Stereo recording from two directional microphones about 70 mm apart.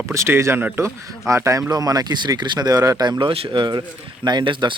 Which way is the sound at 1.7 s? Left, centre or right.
Right.